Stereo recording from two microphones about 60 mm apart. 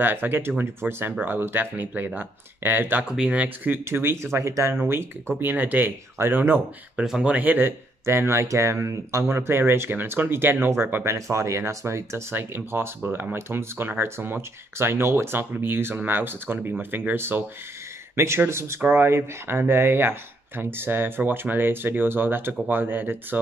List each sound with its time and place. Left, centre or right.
0.0 s speech: right
3.1 s speech: centre
3.4 s speech: right
4.7 s speech: right
7.1 s speech: centre
7.3 s speech: right
8.0 s speech: right
11.1 s speech: right
12.4 s speech: right